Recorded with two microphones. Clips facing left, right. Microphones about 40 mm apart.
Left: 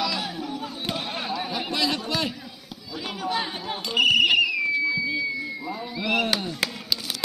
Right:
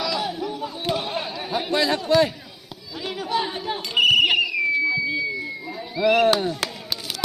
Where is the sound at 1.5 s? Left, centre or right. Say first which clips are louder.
Right 7 dB; right.